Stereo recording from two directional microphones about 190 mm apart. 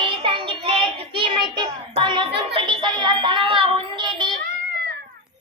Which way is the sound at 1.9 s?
25° right (ahead or behind).